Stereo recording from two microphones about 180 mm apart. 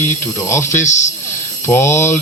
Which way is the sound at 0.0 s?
15° left (ahead or behind).